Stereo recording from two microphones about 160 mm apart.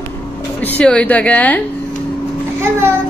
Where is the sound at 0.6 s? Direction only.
10° left (ahead or behind).